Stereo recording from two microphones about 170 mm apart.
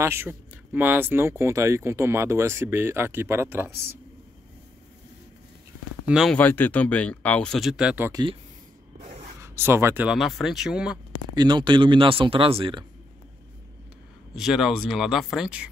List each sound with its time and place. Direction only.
0.0 s speech: 15° right (ahead or behind)
6.0 s speech: 5° right (ahead or behind)
6.3 s speech: 10° left (ahead or behind); by 8.1 s 5° right (ahead or behind)
8.1 s speech: 25° right (ahead or behind)
9.4 s speech: 15° right (ahead or behind)
10.0 s speech: centre (ahead or behind)
11.3 s speech: 25° right (ahead or behind)
14.3 s speech: centre (ahead or behind)